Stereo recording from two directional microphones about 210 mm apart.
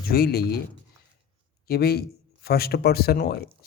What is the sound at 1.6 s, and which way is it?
Speech, 50° left (ahead or behind).